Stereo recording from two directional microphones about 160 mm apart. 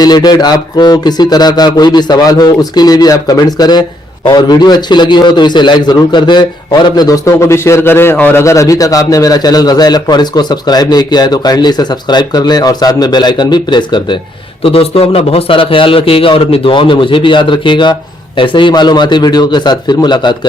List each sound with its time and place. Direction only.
0.0 s a man's voice: 25° left (ahead or behind)